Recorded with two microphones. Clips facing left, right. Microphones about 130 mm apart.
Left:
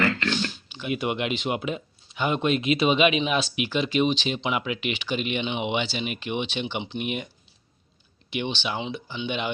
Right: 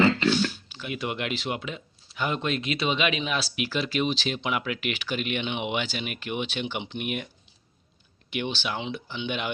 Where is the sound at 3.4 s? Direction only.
40° right (ahead or behind).